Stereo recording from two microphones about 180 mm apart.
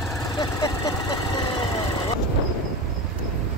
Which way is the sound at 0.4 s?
20° left (ahead or behind).